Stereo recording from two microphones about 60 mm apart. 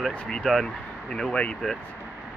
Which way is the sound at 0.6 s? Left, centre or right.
Centre.